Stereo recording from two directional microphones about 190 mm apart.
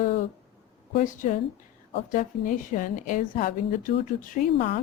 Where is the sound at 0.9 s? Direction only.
45° left (ahead or behind).